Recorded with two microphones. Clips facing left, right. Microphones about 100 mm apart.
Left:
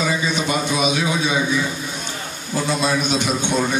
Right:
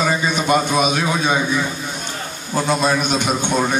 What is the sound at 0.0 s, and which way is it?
A man's voice, 50° right (ahead or behind).